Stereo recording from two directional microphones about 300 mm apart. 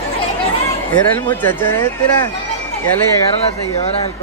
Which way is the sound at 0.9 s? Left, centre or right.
Centre.